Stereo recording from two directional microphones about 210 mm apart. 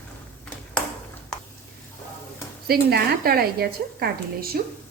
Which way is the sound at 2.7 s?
45° right (ahead or behind).